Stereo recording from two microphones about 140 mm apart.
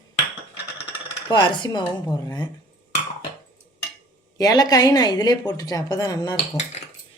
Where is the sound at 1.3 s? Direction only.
35° left (ahead or behind).